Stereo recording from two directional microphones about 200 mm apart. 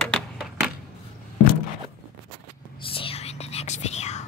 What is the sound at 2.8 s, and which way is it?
Whispering, 25° left (ahead or behind).